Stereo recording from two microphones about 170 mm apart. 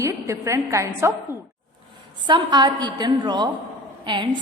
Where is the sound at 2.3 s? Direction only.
25° right (ahead or behind).